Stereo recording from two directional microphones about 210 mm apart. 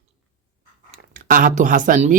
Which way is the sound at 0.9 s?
40° right (ahead or behind).